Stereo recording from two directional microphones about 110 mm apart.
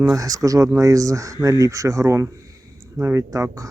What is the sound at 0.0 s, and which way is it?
Speech, 30° right (ahead or behind).